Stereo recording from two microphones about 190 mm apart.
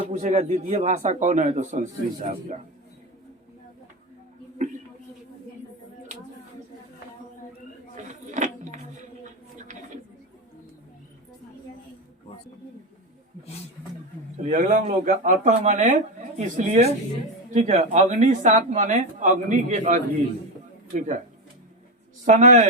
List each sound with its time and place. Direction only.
0.1 s speech: 40° right (ahead or behind)
7.9 s a sound: 40° right (ahead or behind)
14.4 s speech: 40° right (ahead or behind)
22.3 s speech: 40° right (ahead or behind)